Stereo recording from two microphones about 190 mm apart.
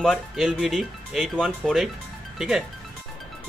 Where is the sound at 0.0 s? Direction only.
Centre (ahead or behind).